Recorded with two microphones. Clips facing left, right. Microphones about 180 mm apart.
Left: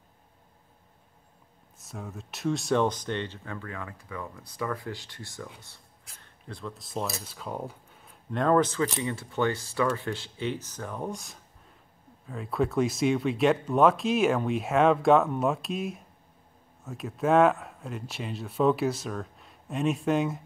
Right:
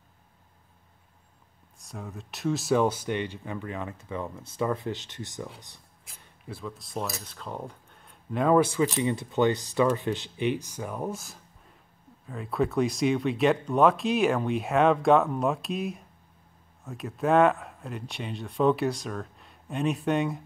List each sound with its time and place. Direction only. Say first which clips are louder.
1.8 s speech: even; centre (ahead or behind)